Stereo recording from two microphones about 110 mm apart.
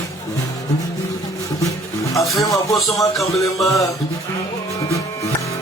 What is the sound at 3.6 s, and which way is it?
Music, centre (ahead or behind).